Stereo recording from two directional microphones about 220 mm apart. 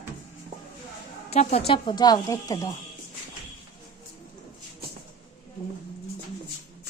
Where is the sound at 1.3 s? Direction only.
30° left (ahead or behind).